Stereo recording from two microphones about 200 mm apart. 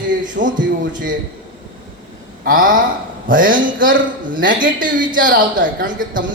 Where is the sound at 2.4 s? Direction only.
45° right (ahead or behind).